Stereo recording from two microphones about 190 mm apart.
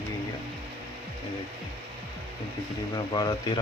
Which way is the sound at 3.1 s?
20° left (ahead or behind).